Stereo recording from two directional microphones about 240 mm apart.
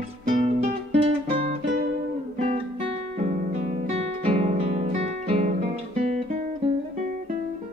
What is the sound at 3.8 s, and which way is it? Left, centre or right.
Guitar, right.